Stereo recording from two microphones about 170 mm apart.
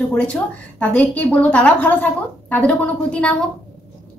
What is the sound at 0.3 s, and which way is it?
A woman's voice, 10° left (ahead or behind).